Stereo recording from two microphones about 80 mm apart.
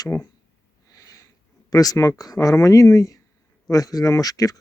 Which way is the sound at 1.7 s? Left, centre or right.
Left.